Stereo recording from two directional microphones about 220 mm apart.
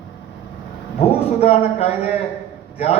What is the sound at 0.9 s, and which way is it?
A man's voice, 25° left (ahead or behind).